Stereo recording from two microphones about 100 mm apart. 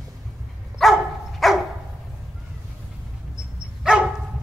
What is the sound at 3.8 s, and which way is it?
Dog, 5° right (ahead or behind).